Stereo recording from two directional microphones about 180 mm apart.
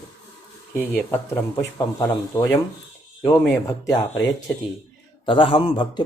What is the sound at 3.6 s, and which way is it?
A man's voice, 20° left (ahead or behind).